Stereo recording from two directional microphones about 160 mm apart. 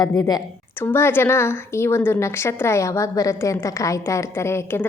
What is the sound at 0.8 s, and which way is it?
A woman's voice, 15° left (ahead or behind).